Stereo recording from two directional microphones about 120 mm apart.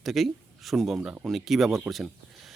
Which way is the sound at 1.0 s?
10° right (ahead or behind).